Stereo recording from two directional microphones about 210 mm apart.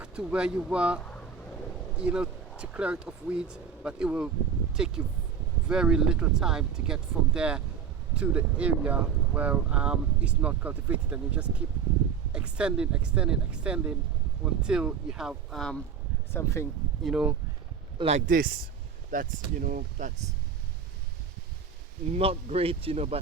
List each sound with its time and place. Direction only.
0.0 s speech: 5° right (ahead or behind)
16.3 s speech: 15° left (ahead or behind)
17.0 s speech: 5° right (ahead or behind)
17.9 s speech: 30° right (ahead or behind)
19.1 s speech: 40° right (ahead or behind)
22.1 s speech: 30° right (ahead or behind)